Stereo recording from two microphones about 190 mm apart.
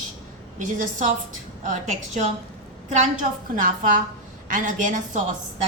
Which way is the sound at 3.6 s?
45° right (ahead or behind).